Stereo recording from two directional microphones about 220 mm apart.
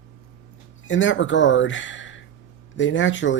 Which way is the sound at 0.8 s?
60° left (ahead or behind).